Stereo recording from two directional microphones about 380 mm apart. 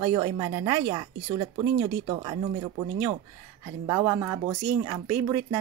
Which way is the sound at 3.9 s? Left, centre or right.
Centre.